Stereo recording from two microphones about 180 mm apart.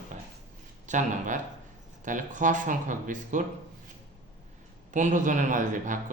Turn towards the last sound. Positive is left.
turn(degrees=-45)  # may be behind; listen again after turning